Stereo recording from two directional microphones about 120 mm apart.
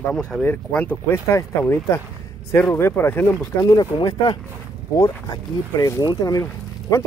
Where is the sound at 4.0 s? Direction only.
40° left (ahead or behind).